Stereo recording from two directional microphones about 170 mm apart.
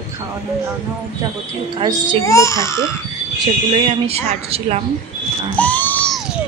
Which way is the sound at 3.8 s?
35° right (ahead or behind).